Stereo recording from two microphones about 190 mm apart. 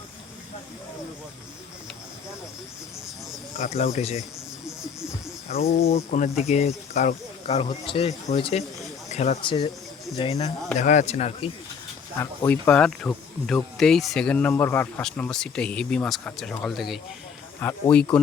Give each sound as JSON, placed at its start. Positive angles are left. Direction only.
{"t": 3.6, "sound": "speech", "side_deg": 40}
{"t": 5.5, "sound": "speech", "side_deg": 35}
{"t": 9.4, "sound": "speech", "side_deg": 25}
{"t": 12.1, "sound": "speech", "side_deg": 15}